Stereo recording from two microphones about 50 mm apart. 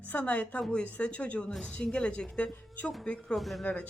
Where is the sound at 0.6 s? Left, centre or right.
Centre.